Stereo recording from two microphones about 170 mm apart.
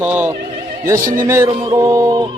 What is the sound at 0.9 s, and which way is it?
Speech, 55° right (ahead or behind).